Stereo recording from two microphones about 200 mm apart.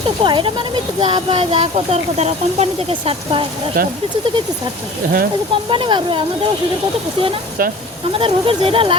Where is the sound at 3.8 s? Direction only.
45° right (ahead or behind).